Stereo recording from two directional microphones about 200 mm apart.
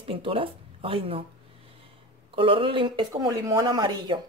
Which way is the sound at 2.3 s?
25° right (ahead or behind).